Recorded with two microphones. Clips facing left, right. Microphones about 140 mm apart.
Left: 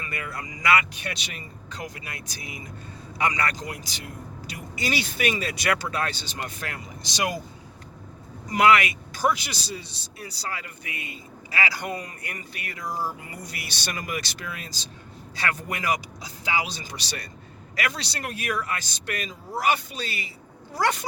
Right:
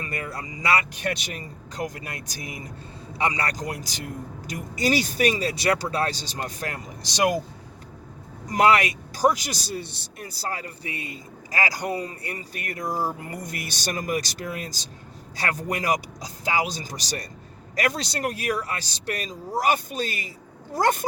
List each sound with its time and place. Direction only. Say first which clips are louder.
0.0 s speech: right 2 dB; 35° right (ahead or behind)
3.2 s speech: even; 30° right (ahead or behind)
8.4 s speech: even; 40° right (ahead or behind)
12.5 s speech: right 3 dB; 45° right (ahead or behind)